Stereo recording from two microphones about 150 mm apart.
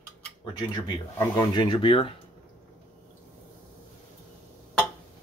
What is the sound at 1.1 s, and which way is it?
Speech, 30° left (ahead or behind).